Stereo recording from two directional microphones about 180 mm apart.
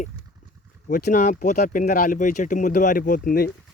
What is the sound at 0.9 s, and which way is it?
Speech, 45° left (ahead or behind).